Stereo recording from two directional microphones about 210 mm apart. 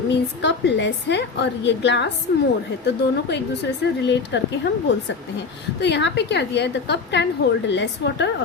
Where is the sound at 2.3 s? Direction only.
40° left (ahead or behind).